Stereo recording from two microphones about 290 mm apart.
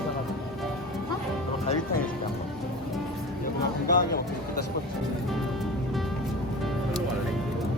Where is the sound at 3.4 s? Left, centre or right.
Left.